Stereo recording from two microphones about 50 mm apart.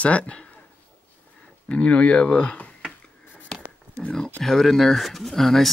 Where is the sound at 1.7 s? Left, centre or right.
Left.